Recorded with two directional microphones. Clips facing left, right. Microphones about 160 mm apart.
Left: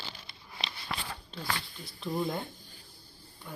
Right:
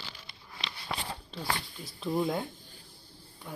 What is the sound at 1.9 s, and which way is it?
Speech, 5° right (ahead or behind).